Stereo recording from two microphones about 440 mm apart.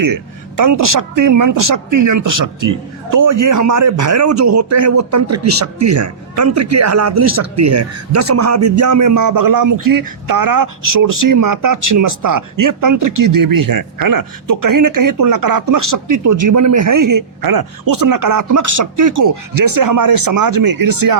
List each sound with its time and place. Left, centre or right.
0.0 s speech: right